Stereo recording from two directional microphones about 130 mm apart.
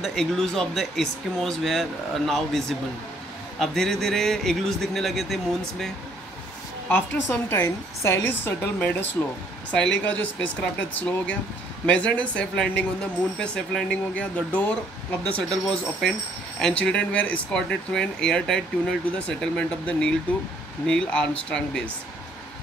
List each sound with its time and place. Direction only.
0.0 s speech: 5° left (ahead or behind)
6.9 s a woman's voice: 15° left (ahead or behind)